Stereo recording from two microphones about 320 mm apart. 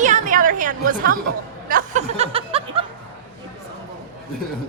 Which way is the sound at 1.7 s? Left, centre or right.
Right.